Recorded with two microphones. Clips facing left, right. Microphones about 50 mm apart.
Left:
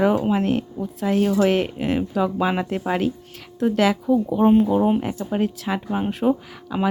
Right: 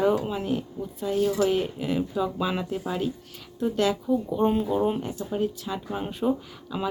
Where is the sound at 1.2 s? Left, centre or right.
Left.